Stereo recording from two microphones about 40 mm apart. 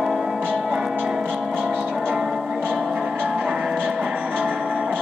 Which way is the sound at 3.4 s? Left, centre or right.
Right.